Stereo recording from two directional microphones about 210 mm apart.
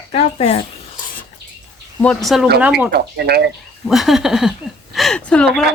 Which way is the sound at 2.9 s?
50° right (ahead or behind).